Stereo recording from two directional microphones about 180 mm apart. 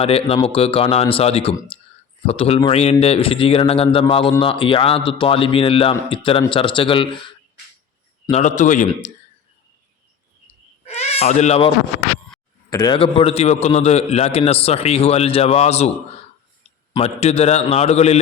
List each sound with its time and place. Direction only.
0.0 s a man's voice: 30° left (ahead or behind)
8.3 s a man's voice: 40° left (ahead or behind)
10.8 s bleat: 35° left (ahead or behind)
12.7 s a man's voice: 25° left (ahead or behind)